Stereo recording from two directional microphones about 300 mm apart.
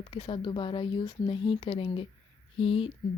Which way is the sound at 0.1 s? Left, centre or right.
Centre.